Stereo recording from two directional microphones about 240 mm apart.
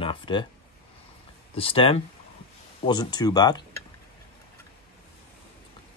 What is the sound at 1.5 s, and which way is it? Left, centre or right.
Speech, left.